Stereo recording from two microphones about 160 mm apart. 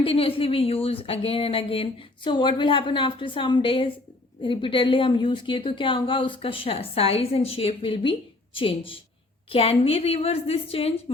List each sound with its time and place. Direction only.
0.0 s speech: 35° left (ahead or behind)